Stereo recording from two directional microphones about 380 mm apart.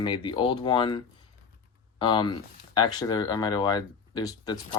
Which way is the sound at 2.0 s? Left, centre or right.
Centre.